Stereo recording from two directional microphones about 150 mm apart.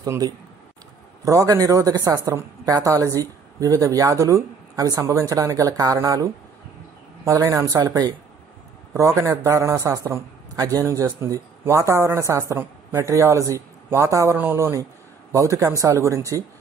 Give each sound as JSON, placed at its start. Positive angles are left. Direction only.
{"t": 0.0, "sound": "a man's voice", "side_deg": -25}